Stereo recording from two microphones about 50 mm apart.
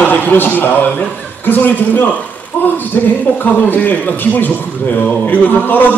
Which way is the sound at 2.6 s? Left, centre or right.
Left.